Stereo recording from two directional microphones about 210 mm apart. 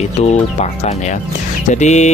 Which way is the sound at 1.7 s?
35° left (ahead or behind).